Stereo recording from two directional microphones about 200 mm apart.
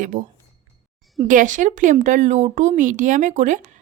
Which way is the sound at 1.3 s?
40° right (ahead or behind).